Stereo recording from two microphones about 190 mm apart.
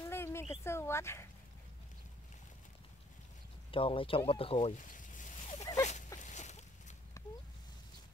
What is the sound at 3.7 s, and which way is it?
Speech, 30° left (ahead or behind).